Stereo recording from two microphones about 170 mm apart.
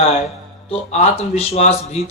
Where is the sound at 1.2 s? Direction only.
40° left (ahead or behind).